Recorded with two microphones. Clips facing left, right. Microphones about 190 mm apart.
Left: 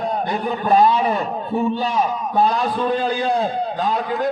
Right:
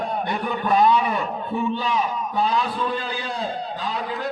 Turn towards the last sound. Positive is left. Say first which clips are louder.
# left 6 dB
turn(degrees=45)  # may be behind; listen again after turning